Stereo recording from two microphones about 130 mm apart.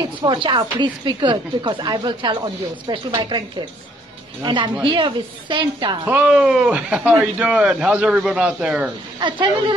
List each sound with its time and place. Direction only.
0.0 s speech: 35° right (ahead or behind)
6.0 s a man's voice: 10° right (ahead or behind)
9.2 s speech: 35° right (ahead or behind)